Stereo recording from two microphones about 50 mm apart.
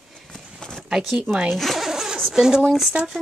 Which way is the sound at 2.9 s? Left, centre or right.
Right.